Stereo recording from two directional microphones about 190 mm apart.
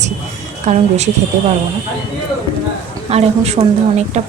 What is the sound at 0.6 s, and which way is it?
Speech, 35° right (ahead or behind).